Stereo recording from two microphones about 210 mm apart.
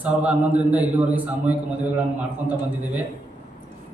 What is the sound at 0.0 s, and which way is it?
A man's voice, 5° right (ahead or behind).